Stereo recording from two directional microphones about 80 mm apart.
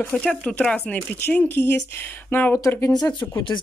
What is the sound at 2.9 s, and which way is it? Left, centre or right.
Speech, left.